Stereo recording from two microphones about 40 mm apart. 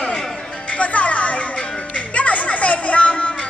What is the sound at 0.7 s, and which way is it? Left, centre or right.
Music, left.